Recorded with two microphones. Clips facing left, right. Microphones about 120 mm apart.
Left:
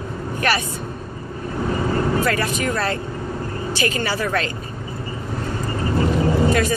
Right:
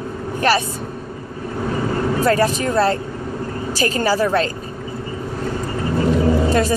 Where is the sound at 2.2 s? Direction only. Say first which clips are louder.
Right 5 dB; 35° right (ahead or behind).